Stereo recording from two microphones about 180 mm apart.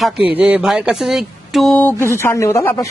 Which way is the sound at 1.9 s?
15° left (ahead or behind).